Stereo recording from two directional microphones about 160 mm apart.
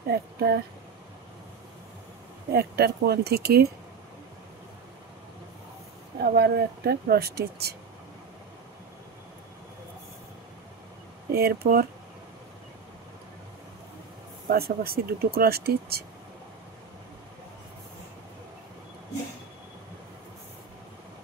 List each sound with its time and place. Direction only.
0.1 s speech: 85° right
2.5 s speech: 80° right
6.3 s speech: 80° right
11.3 s speech: 75° right (ahead or behind)
14.5 s speech: 70° right (ahead or behind)